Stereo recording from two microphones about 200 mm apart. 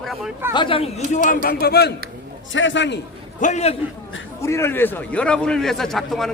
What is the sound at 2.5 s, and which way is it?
Speech, 70° left (ahead or behind).